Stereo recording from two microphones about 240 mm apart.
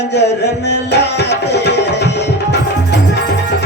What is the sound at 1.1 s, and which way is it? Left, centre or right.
Tabla, left.